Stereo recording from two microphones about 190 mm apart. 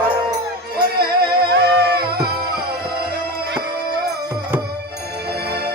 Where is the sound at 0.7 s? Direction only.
55° right (ahead or behind).